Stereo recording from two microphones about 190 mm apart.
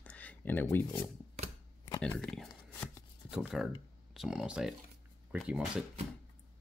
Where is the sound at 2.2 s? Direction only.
5° left (ahead or behind).